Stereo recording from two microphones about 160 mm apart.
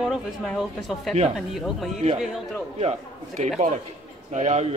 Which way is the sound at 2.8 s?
40° right (ahead or behind).